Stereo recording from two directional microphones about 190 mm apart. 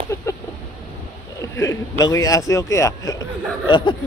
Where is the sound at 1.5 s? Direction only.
15° left (ahead or behind).